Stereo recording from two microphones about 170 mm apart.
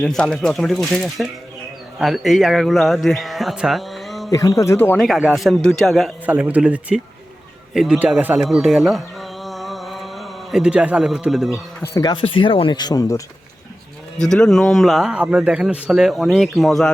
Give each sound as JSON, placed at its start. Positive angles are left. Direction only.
{"t": 0.0, "sound": "speech", "side_deg": 5}
{"t": 4.3, "sound": "speech", "side_deg": 20}
{"t": 4.9, "sound": "a man's voice", "side_deg": 0}
{"t": 11.8, "sound": "speech", "side_deg": 20}
{"t": 14.2, "sound": "speech", "side_deg": 5}